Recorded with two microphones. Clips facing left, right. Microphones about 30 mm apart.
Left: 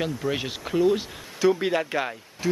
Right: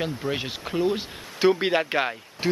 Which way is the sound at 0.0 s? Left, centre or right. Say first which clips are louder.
Left 1 dB; centre.